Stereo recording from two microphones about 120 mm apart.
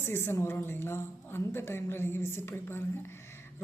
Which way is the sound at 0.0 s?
20° left (ahead or behind).